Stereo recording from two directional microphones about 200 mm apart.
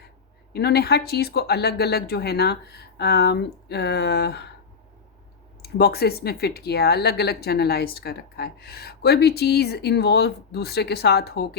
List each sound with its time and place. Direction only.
0.5 s speech: 55° left (ahead or behind)
5.7 s speech: 50° left (ahead or behind)